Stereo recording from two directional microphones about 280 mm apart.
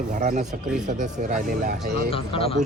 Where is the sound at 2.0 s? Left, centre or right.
Centre.